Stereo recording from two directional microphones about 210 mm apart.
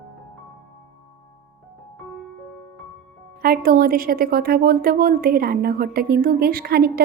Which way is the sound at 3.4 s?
45° right (ahead or behind).